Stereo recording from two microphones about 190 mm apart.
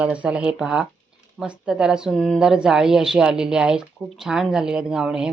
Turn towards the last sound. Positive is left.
turn(degrees=-5)  # may be behind; listen again after turning